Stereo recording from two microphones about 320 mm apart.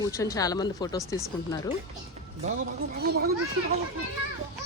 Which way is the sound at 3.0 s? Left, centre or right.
Right.